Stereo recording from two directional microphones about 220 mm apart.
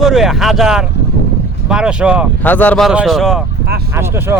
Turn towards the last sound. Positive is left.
turn(degrees=-10)  # may be behind; listen again after turning